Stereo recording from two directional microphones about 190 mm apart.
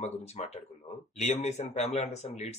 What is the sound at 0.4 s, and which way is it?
Speech, 35° left (ahead or behind).